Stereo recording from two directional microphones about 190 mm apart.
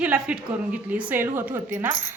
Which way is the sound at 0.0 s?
5° right (ahead or behind).